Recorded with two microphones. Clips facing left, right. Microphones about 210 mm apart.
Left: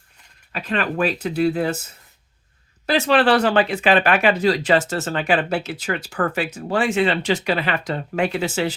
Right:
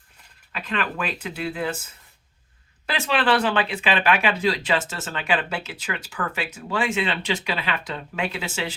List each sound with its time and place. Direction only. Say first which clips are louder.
0.5 s speech: left 5 dB; 40° left (ahead or behind)
2.8 s speech: left 7 dB; 40° left (ahead or behind)